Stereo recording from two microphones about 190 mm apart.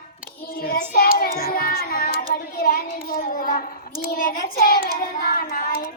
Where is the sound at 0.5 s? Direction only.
50° left (ahead or behind).